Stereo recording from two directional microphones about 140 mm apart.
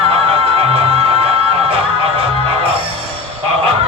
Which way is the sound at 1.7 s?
40° right (ahead or behind).